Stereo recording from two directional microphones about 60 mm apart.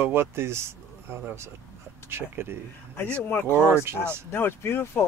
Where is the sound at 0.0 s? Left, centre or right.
Right.